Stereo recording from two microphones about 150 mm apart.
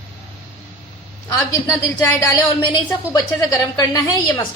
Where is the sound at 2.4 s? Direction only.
30° left (ahead or behind).